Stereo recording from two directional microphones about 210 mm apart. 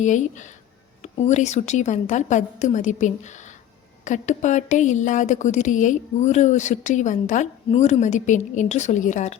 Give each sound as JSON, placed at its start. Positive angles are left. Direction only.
{"t": 0.0, "sound": "speech", "side_deg": 35}